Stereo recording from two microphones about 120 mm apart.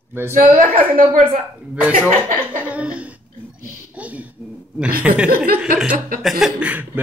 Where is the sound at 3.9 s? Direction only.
10° right (ahead or behind).